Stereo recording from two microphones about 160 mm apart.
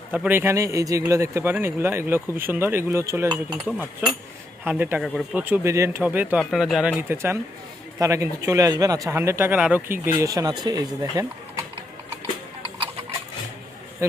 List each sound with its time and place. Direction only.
0.1 s speech: 10° right (ahead or behind)
3.7 s speech: 5° right (ahead or behind)
7.1 s speech: 15° right (ahead or behind)
10.2 s speech: 20° right (ahead or behind)